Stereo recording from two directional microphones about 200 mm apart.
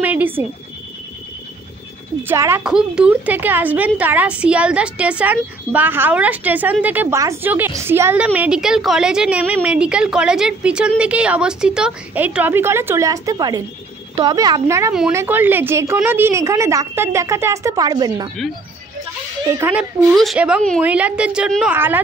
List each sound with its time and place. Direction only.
0.0 s neigh: 10° right (ahead or behind)
2.2 s a woman's voice: 15° right (ahead or behind)
19.6 s a woman's voice: 5° right (ahead or behind)